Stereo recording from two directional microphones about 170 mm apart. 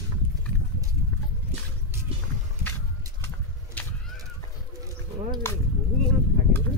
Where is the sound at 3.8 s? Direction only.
10° left (ahead or behind).